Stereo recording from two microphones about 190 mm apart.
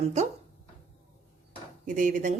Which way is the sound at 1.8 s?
45° right (ahead or behind).